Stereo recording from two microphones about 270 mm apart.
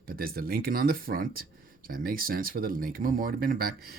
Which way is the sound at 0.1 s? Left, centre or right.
Right.